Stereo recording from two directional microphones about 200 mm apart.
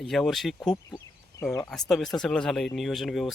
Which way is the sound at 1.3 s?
15° left (ahead or behind).